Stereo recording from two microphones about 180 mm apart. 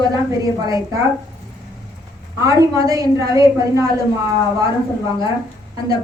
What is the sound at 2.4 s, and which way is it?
A woman's voice, 20° right (ahead or behind).